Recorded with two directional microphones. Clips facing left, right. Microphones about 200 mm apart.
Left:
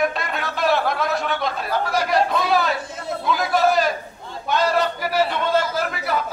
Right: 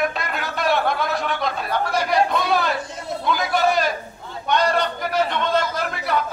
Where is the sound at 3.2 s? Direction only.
Centre (ahead or behind).